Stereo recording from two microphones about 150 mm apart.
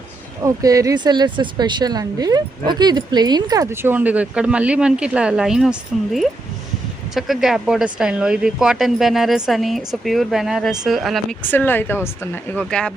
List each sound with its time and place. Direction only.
0.4 s speech: 25° right (ahead or behind); by 5.7 s 5° right (ahead or behind)
7.1 s a woman's voice: centre (ahead or behind)
11.4 s speech: 15° left (ahead or behind)